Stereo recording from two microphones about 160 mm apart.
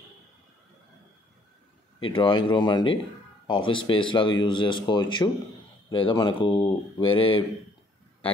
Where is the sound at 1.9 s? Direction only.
30° left (ahead or behind).